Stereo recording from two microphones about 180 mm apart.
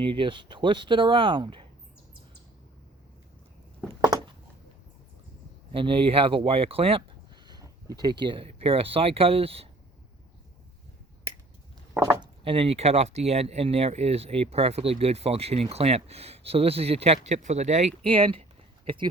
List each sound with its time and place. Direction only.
0.0 s speech: 25° right (ahead or behind)
4.0 s a sound: 25° right (ahead or behind)
5.7 s speech: 30° right (ahead or behind)
7.4 s speech: 20° right (ahead or behind)
12.5 s speech: 30° right (ahead or behind)